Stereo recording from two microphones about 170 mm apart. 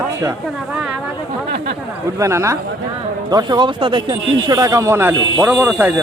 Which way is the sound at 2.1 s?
15° right (ahead or behind).